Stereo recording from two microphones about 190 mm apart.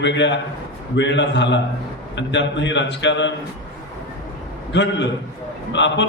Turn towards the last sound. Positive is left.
turn(degrees=70)  # may be behind; listen again after turning